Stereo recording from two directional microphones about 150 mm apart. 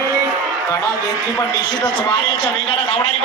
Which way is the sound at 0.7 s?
20° left (ahead or behind).